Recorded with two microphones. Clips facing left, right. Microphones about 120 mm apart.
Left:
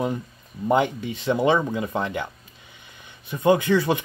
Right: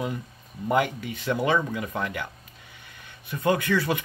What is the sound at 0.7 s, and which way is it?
Speech, 25° left (ahead or behind).